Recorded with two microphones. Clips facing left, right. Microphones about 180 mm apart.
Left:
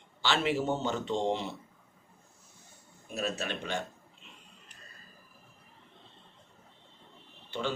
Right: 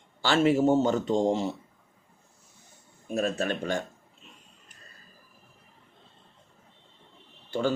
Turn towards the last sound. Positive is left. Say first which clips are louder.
# right 7 dB
turn(degrees=-45)  # may be behind; listen again after turning